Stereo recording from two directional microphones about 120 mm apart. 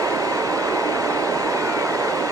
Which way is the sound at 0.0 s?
25° right (ahead or behind).